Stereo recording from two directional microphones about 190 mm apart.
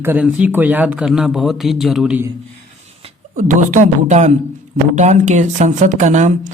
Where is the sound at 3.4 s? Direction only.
40° right (ahead or behind).